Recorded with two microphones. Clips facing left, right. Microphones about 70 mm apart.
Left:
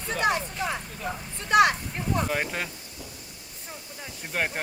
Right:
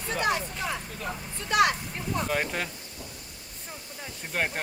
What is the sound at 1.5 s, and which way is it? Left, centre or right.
Speech, left.